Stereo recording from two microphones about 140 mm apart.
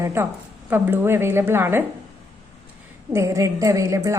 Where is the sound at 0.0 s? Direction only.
15° right (ahead or behind).